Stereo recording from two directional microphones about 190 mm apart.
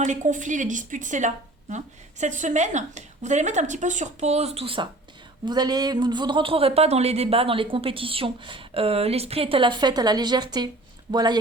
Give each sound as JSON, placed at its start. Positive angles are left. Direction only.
{"t": 0.0, "sound": "a woman's voice", "side_deg": -40}